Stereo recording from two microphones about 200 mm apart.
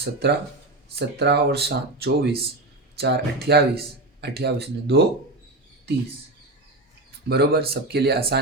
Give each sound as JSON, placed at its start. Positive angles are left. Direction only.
{"t": 0.0, "sound": "speech", "side_deg": -55}
{"t": 7.3, "sound": "speech", "side_deg": -50}